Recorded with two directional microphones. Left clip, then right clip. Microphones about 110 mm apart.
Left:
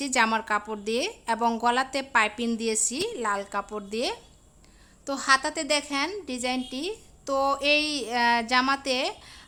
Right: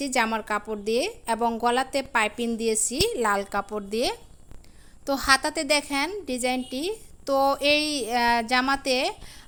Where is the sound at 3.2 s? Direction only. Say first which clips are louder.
Right 2 dB; 60° right (ahead or behind).